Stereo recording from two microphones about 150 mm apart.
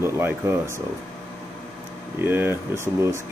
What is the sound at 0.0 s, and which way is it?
Speech, 15° right (ahead or behind).